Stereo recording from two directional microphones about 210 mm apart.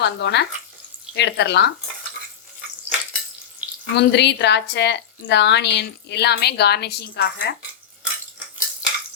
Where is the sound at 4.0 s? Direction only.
55° left (ahead or behind).